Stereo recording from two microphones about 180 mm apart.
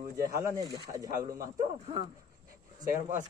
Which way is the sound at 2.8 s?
45° right (ahead or behind).